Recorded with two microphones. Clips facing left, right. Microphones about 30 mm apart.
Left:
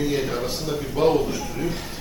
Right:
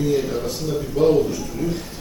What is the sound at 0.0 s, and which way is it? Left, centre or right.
A man's voice, left.